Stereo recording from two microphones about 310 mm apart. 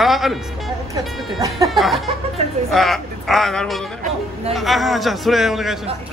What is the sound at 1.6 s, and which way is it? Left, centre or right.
Speech, centre.